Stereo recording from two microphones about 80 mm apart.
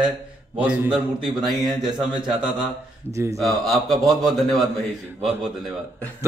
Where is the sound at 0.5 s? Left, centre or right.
Centre.